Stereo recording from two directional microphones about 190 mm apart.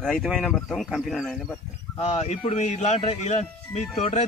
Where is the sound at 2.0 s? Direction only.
35° left (ahead or behind).